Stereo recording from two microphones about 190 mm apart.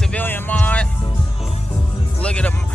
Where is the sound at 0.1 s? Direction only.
10° left (ahead or behind).